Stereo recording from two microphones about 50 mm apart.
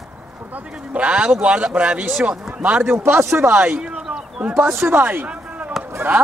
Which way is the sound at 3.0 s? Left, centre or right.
Right.